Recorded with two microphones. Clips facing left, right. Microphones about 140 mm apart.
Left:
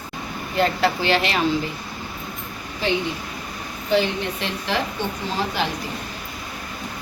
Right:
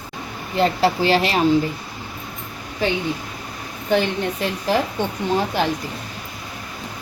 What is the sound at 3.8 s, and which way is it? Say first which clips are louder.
A woman's voice: right 1 dB; 45° right (ahead or behind).